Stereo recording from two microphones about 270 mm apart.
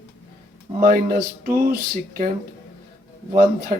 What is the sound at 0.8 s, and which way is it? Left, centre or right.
Speech, right.